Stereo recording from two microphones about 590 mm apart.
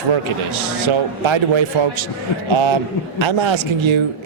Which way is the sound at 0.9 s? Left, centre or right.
Right.